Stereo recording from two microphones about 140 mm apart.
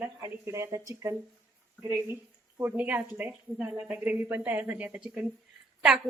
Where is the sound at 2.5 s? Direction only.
15° right (ahead or behind).